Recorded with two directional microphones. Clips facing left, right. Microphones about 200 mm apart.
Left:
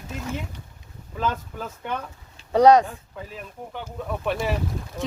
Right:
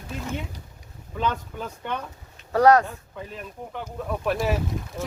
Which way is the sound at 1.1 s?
Centre (ahead or behind).